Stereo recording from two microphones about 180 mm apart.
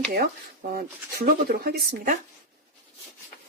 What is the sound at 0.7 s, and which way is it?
Speech, 55° right (ahead or behind).